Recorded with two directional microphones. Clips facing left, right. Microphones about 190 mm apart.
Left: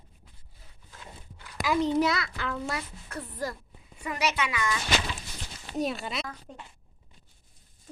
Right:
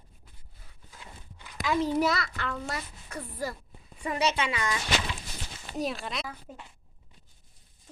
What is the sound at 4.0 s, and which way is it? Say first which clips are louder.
Speech: right 2 dB; 25° right (ahead or behind).